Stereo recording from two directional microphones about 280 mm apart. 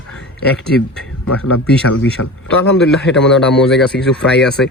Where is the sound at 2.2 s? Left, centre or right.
Left.